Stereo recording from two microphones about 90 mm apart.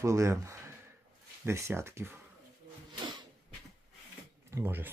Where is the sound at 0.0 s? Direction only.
35° right (ahead or behind).